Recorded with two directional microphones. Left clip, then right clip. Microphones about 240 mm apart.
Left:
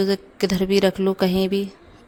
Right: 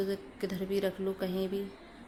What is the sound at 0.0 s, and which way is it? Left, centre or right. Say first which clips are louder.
A woman's voice: left 13 dB; left.